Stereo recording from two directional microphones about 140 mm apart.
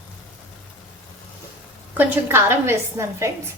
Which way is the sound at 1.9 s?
15° right (ahead or behind).